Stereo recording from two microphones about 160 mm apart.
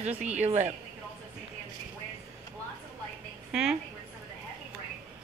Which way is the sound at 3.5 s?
5° right (ahead or behind).